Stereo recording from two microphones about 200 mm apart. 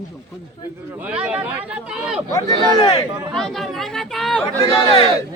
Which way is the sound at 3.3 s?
Centre (ahead or behind).